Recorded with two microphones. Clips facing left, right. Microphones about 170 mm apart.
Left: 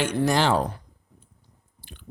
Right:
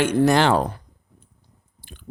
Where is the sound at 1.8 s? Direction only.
45° right (ahead or behind).